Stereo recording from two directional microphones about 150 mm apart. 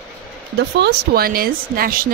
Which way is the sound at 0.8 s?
90° right.